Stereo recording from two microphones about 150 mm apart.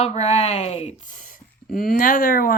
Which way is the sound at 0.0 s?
45° left (ahead or behind).